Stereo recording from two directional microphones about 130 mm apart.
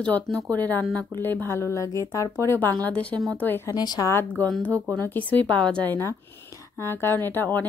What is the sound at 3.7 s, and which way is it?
Speech, 30° left (ahead or behind).